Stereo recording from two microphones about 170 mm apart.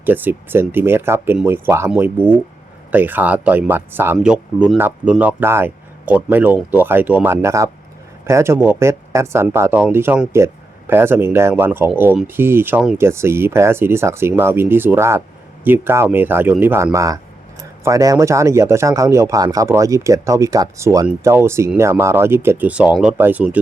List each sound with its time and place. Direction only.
0.0 s speech: 10° right (ahead or behind)